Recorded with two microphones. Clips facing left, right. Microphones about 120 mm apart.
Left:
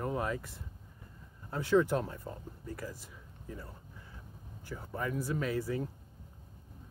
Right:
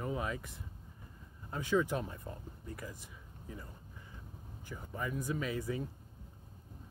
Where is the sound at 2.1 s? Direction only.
Centre (ahead or behind).